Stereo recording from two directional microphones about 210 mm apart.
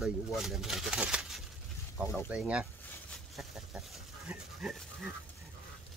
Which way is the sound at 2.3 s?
5° right (ahead or behind).